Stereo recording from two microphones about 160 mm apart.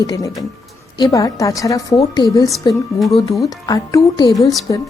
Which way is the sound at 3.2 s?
20° left (ahead or behind).